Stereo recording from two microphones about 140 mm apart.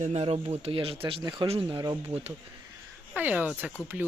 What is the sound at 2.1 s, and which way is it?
Speech, 45° right (ahead or behind).